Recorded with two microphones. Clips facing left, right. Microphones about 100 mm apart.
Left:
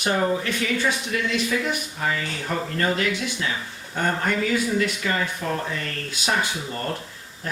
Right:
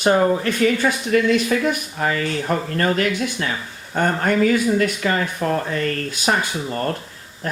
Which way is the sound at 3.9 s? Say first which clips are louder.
Right 5 dB; 50° right (ahead or behind).